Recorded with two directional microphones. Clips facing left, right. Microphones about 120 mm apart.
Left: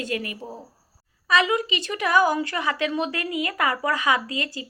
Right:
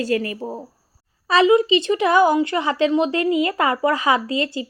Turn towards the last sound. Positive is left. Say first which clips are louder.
# right 7 dB
turn(degrees=-30)  # may be behind; listen again after turning